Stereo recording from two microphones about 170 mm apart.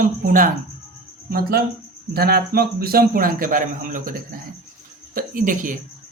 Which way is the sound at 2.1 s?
65° right (ahead or behind).